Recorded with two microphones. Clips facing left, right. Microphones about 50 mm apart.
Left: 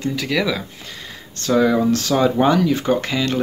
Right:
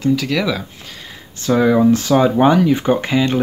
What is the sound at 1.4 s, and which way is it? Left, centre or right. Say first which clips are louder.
Speech: right 3 dB; centre.